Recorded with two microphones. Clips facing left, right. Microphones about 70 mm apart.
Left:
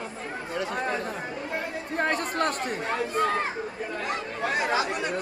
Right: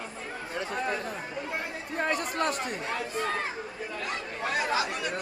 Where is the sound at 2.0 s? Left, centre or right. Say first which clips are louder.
Left 2 dB; left.